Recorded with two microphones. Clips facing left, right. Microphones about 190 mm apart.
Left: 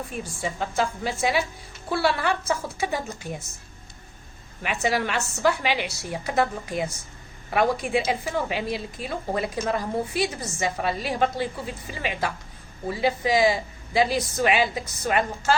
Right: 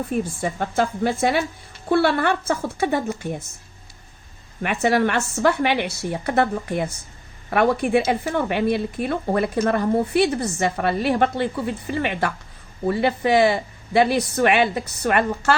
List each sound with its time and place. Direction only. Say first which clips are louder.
0.4 s a woman's voice: even; 55° right (ahead or behind)
4.6 s a woman's voice: right 6 dB; 55° right (ahead or behind)